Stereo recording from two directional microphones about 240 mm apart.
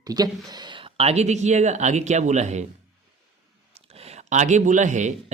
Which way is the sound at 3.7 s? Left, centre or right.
Right.